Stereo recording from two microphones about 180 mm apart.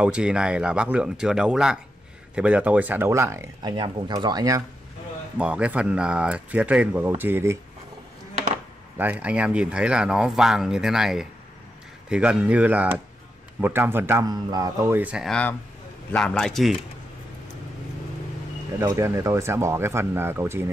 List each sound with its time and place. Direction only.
0.0 s speech: 5° right (ahead or behind)
5.4 s speech: 5° right (ahead or behind)
8.9 s speech: 10° right (ahead or behind)
18.8 s speech: 20° right (ahead or behind)